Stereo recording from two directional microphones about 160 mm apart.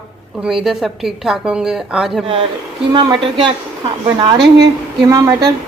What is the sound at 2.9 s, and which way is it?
Speech, 30° right (ahead or behind).